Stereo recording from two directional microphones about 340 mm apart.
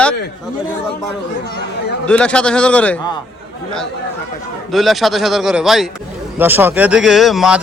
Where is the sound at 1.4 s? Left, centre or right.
Left.